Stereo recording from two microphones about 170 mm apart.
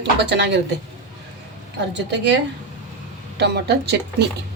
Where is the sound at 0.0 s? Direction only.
90° right.